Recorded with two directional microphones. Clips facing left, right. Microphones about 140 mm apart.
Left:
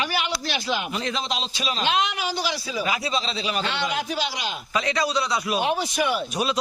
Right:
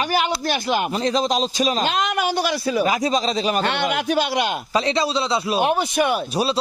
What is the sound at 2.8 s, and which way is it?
A man's voice, 40° right (ahead or behind).